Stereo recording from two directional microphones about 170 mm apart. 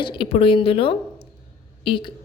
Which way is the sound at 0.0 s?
30° left (ahead or behind).